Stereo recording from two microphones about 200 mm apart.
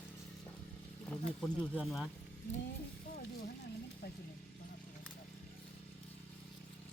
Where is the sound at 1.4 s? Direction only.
Centre (ahead or behind).